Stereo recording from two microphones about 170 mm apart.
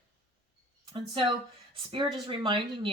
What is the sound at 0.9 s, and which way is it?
Speech, 30° right (ahead or behind).